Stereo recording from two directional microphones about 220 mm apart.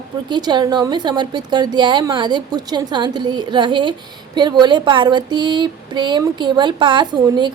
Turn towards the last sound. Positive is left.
turn(degrees=-20)  # may be behind; listen again after turning